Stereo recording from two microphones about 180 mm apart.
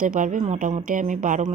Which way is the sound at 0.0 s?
45° right (ahead or behind).